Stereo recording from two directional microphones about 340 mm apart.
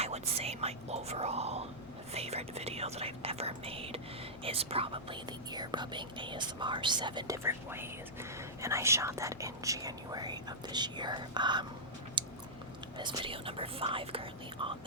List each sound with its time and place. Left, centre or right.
0.0 s whispering: centre
2.1 s speech: centre
12.2 s chewing: centre
13.0 s speech: centre